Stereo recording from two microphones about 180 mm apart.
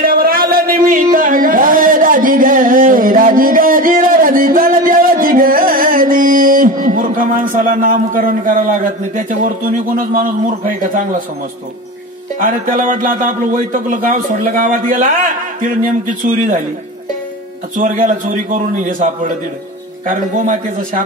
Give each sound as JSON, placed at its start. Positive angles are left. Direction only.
{"t": 0.0, "sound": "a sound", "side_deg": -55}
{"t": 12.4, "sound": "speech", "side_deg": -50}
{"t": 17.7, "sound": "speech", "side_deg": -45}